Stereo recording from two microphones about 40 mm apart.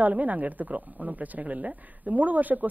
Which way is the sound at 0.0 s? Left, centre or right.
Right.